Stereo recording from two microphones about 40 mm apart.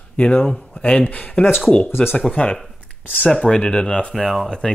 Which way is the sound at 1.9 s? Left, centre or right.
Left.